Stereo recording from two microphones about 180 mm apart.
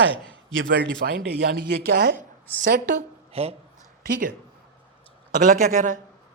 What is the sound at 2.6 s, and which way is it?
Speech, 50° right (ahead or behind).